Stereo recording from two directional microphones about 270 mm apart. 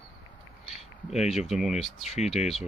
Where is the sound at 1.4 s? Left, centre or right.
Centre.